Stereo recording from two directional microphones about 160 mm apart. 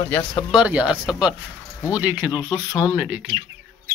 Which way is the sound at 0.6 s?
5° right (ahead or behind).